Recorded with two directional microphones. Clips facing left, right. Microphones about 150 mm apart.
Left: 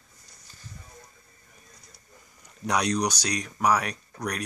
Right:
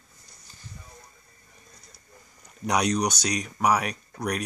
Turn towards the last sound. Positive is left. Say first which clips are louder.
# right 3 dB
turn(degrees=-5)  # may be behind; listen again after turning